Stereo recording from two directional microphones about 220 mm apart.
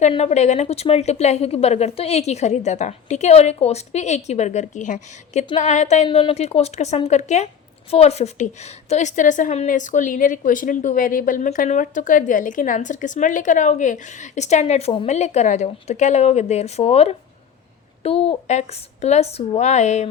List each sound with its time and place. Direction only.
0.0 s a woman's voice: 30° left (ahead or behind)